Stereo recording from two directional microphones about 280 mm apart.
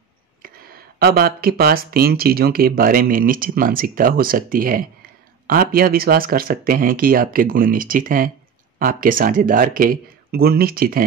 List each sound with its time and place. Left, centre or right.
0.9 s speech: right